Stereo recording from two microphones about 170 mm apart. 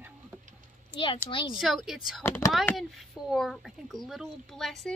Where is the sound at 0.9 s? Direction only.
30° left (ahead or behind).